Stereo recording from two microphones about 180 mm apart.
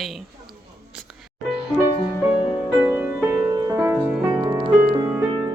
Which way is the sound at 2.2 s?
5° right (ahead or behind).